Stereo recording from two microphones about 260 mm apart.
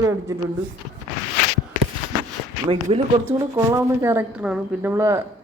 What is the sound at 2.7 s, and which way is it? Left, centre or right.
Speech, right.